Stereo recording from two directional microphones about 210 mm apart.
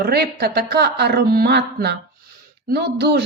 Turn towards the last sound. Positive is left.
turn(degrees=-50)  # may be behind; listen again after turning